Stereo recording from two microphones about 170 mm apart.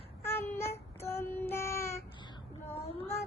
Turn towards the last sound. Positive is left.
turn(degrees=35)  # may be behind; listen again after turning